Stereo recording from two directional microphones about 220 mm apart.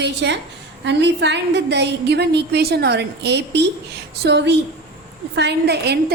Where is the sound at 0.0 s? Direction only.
50° right (ahead or behind).